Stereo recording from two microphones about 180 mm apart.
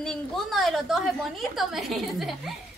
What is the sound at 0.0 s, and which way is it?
A woman's voice, centre (ahead or behind).